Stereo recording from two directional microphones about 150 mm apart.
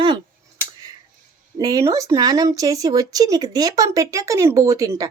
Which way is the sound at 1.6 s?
20° right (ahead or behind).